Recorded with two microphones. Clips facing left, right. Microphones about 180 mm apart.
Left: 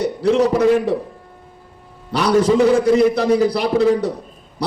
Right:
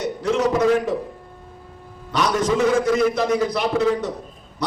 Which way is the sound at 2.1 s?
35° left (ahead or behind).